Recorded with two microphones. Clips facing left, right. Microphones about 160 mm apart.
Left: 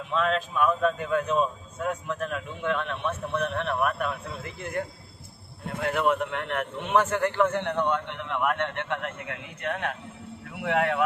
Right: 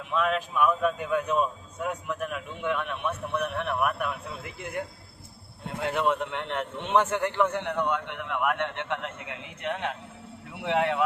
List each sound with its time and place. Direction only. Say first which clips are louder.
0.1 s a man's voice: left 1 dB; 10° right (ahead or behind)